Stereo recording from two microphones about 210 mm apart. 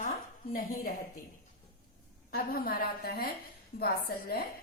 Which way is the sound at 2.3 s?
45° left (ahead or behind).